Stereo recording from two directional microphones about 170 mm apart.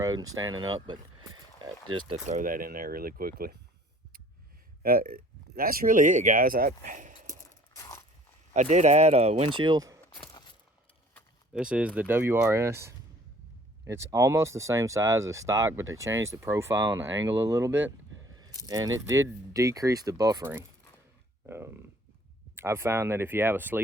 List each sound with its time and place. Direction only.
0.0 s speech: 20° right (ahead or behind)
2.2 s speech: 50° right (ahead or behind)
4.8 s speech: 60° right (ahead or behind)
7.8 s crunch: 20° left (ahead or behind)
8.5 s speech: 45° right (ahead or behind); by 10.0 s 20° right (ahead or behind)
11.5 s speech: 5° right (ahead or behind)
17.1 s speech: 90° right
17.5 s speech: 15° right (ahead or behind)